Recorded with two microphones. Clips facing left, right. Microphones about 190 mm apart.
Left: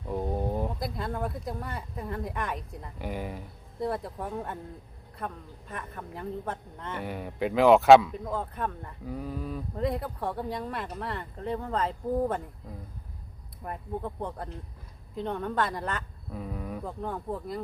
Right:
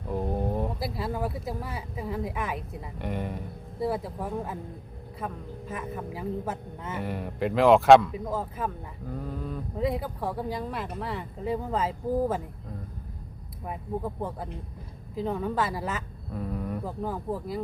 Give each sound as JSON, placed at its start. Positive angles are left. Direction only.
{"t": 0.1, "sound": "speech", "side_deg": 0}
{"t": 9.1, "sound": "mantra", "side_deg": 5}
{"t": 9.7, "sound": "speech", "side_deg": 0}
{"t": 13.7, "sound": "speech", "side_deg": -5}